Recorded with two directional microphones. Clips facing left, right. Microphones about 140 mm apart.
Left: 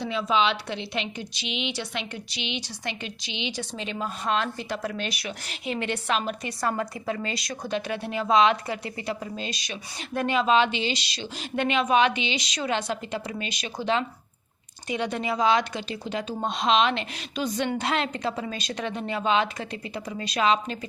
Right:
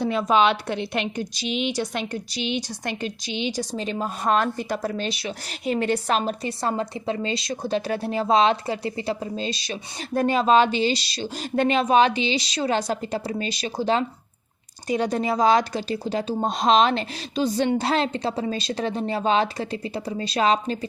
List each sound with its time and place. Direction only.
0.0 s a woman's voice: 50° right (ahead or behind); by 5.5 s 25° right (ahead or behind)
5.6 s speech: 40° right (ahead or behind)